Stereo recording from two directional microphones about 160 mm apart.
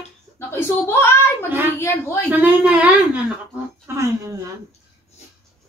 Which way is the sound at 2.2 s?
10° right (ahead or behind).